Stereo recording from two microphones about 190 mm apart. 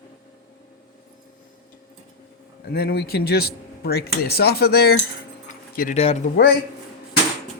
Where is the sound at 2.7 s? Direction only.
55° left (ahead or behind).